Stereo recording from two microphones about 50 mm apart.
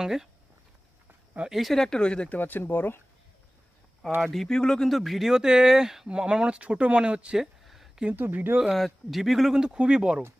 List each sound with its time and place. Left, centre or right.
0.0 s speech: centre
1.5 s a man's voice: centre
1.8 s speech: centre
2.3 s speech: left
2.6 s speech: left
4.2 s speech: centre
4.9 s speech: centre; by 7.3 s right
7.6 s a sound: centre
8.1 s speech: right
8.7 s a man's voice: centre
9.6 s speech: centre